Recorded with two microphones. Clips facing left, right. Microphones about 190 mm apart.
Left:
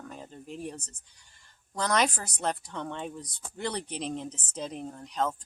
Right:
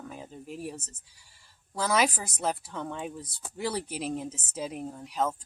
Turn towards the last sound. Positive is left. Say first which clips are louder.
# right 1 dB
turn(degrees=-5)  # may be behind; listen again after turning